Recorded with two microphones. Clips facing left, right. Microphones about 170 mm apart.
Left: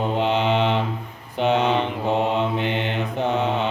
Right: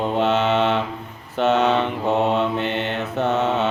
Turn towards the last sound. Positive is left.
turn(degrees=15)  # may be behind; listen again after turning